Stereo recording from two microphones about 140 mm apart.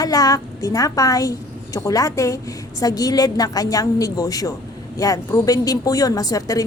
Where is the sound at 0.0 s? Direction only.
25° left (ahead or behind).